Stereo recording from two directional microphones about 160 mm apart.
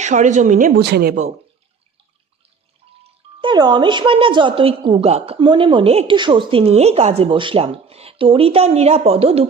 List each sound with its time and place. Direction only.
0.0 s speech: 50° right (ahead or behind)
0.8 s speech: 90° right
3.0 s speech: 30° right (ahead or behind)